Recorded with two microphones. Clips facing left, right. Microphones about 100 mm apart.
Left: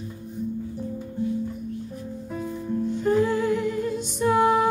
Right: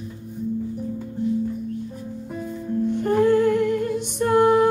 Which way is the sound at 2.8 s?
55° right (ahead or behind).